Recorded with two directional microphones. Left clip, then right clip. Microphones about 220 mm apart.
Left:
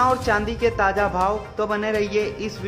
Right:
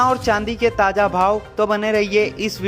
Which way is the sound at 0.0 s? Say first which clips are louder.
Right 2 dB; 30° right (ahead or behind).